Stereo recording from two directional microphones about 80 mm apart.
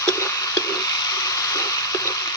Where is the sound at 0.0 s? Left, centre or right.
Left.